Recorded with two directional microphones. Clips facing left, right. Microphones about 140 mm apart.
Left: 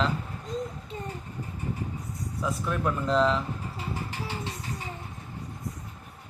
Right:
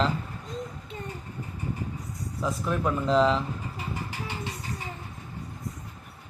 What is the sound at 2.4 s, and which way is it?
Speech, 5° right (ahead or behind).